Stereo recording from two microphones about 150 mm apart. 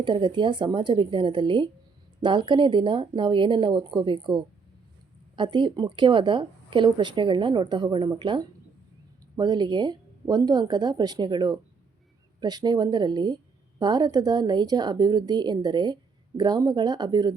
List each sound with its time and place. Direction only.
0.0 s a woman's voice: 30° right (ahead or behind)